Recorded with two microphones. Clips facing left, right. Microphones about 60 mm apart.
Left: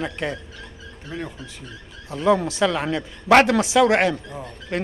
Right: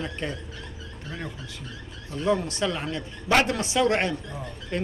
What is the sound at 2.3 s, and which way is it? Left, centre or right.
Speech, left.